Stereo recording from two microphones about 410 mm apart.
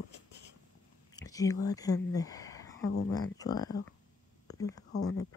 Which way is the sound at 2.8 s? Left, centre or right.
Left.